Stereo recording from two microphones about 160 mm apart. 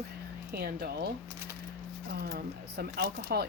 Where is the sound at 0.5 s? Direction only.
75° right (ahead or behind).